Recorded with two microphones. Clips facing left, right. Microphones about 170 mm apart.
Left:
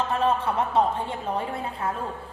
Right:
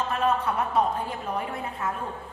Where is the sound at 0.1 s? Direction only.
25° left (ahead or behind).